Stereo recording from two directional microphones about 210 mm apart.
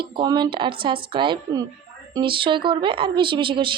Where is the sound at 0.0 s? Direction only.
25° right (ahead or behind).